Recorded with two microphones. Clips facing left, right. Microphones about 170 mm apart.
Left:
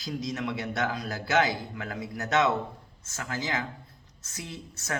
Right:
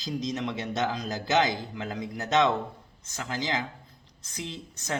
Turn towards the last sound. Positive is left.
turn(degrees=-15)  # may be behind; listen again after turning